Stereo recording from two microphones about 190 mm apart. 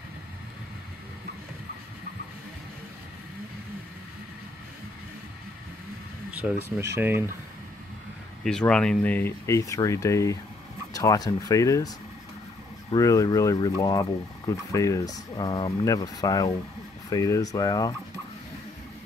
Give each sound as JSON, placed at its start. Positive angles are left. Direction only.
{"t": 6.3, "sound": "speech", "side_deg": -10}
{"t": 8.5, "sound": "speech", "side_deg": 5}
{"t": 12.9, "sound": "speech", "side_deg": 15}